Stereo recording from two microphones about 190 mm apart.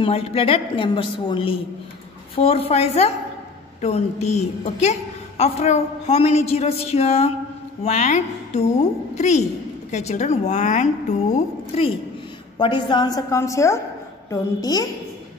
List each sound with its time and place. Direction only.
0.0 s a woman's voice: 30° left (ahead or behind)